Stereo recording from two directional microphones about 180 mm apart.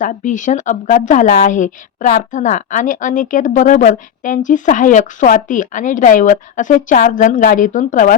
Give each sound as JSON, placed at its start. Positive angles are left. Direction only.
{"t": 0.0, "sound": "speech", "side_deg": 45}